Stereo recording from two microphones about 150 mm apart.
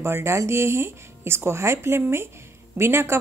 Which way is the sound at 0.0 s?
15° right (ahead or behind).